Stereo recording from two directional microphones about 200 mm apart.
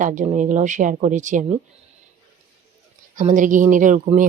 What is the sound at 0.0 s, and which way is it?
Speech, 40° right (ahead or behind).